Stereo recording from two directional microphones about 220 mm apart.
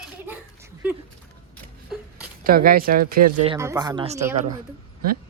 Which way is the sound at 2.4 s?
40° right (ahead or behind).